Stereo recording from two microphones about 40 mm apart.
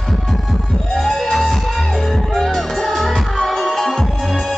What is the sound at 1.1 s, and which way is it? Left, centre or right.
Music, centre.